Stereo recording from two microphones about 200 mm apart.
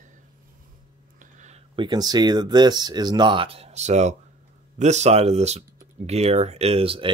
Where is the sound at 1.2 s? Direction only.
35° right (ahead or behind).